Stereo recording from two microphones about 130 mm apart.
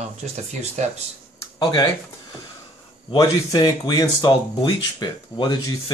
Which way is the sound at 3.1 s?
30° left (ahead or behind).